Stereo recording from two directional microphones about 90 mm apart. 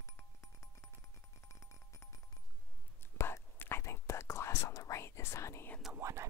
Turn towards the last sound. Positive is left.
turn(degrees=-30)  # may be behind; listen again after turning